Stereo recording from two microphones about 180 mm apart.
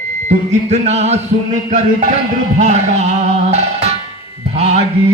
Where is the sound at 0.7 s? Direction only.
35° right (ahead or behind).